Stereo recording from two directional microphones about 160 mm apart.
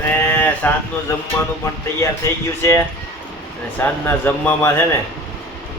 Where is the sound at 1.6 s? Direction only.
15° left (ahead or behind).